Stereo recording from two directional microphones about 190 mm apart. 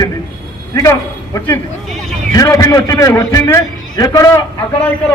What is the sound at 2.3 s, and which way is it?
A man's voice, 15° left (ahead or behind).